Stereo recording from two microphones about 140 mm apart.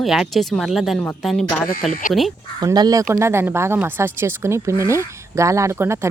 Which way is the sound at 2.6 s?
30° right (ahead or behind).